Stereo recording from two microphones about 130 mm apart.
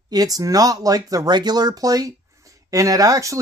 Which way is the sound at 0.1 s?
30° right (ahead or behind).